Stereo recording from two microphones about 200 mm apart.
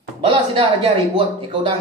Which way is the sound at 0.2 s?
25° right (ahead or behind).